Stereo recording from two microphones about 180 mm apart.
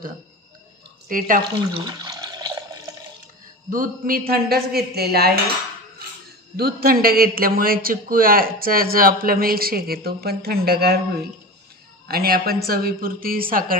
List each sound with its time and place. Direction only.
1.0 s speech: 50° right (ahead or behind)
1.8 s water: 25° right (ahead or behind)
3.7 s a man's voice: 50° right (ahead or behind)
6.5 s a man's voice: 55° right (ahead or behind)
12.1 s a man's voice: 55° right (ahead or behind)